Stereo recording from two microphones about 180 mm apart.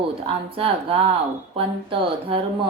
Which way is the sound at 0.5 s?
30° right (ahead or behind).